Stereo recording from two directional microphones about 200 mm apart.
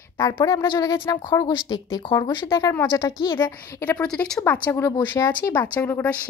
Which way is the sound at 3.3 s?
10° left (ahead or behind).